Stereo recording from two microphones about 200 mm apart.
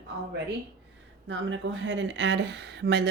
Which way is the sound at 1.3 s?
65° right (ahead or behind).